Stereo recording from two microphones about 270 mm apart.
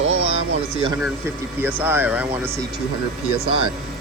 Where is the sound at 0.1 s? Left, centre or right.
Right.